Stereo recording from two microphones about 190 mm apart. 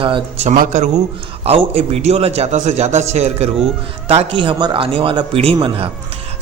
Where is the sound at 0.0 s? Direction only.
30° right (ahead or behind).